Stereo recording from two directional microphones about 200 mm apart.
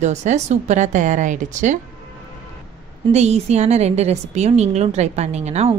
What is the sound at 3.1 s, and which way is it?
A woman's voice, 35° right (ahead or behind).